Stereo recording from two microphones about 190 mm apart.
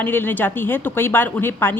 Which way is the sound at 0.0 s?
10° left (ahead or behind).